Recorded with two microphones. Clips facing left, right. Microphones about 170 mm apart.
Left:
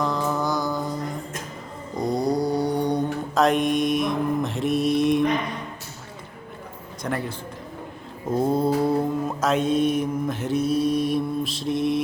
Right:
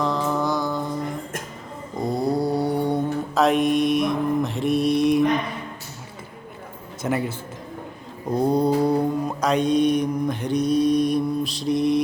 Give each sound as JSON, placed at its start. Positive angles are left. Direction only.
{"t": 0.0, "sound": "mantra", "side_deg": 0}
{"t": 7.0, "sound": "a man's voice", "side_deg": -5}
{"t": 8.3, "sound": "mantra", "side_deg": 0}